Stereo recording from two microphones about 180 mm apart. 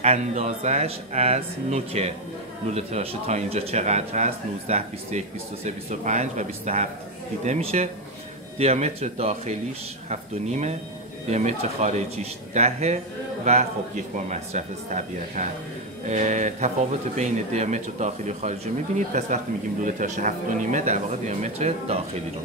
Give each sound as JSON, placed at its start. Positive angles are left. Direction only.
{"t": 0.0, "sound": "speech", "side_deg": -35}
{"t": 14.1, "sound": "speech", "side_deg": -40}